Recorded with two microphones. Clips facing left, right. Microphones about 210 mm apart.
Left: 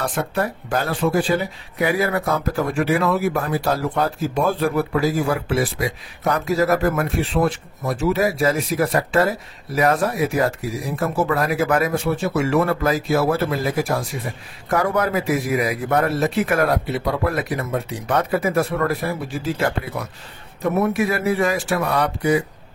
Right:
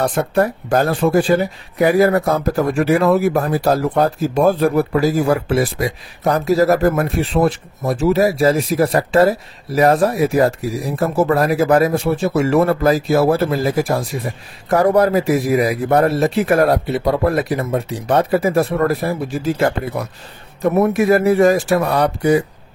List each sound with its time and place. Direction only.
0.0 s speech: 40° right (ahead or behind)
20.8 s speech: 45° right (ahead or behind)